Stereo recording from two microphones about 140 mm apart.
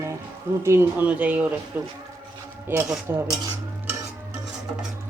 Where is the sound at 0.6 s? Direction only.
15° right (ahead or behind).